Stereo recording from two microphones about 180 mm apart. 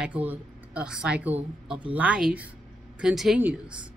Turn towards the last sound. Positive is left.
turn(degrees=-5)  # may be behind; listen again after turning